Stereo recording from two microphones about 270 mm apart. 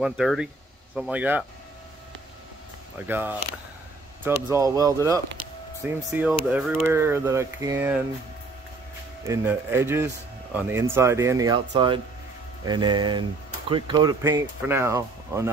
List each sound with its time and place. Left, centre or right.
0.0 s speech: centre
3.1 s speech: centre
4.5 s speech: centre
9.2 s speech: centre